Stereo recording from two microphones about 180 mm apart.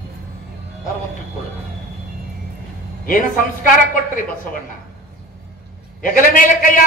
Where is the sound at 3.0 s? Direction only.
50° left (ahead or behind).